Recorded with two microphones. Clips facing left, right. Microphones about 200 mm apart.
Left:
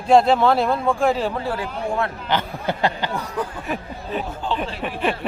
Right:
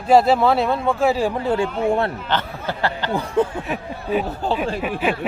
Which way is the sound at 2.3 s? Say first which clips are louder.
Left 1 dB; 15° left (ahead or behind).